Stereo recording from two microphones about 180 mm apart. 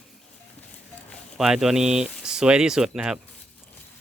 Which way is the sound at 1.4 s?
5° right (ahead or behind).